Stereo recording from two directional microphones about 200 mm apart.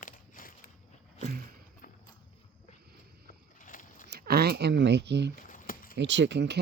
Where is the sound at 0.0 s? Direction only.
45° left (ahead or behind).